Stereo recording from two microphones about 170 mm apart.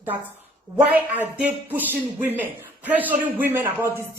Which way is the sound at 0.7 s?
10° right (ahead or behind).